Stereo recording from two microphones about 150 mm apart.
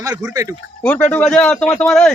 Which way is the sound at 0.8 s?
10° left (ahead or behind).